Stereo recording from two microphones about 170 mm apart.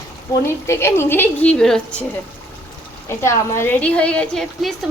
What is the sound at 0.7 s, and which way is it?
Speech, 15° left (ahead or behind).